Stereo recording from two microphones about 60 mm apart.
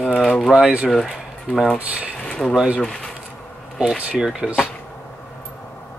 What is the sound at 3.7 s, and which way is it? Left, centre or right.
Speech, centre.